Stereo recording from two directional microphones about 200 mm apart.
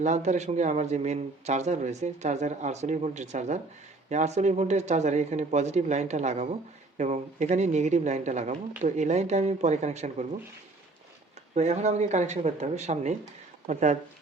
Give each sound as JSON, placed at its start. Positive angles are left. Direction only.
{"t": 0.0, "sound": "speech", "side_deg": -35}
{"t": 11.5, "sound": "speech", "side_deg": -35}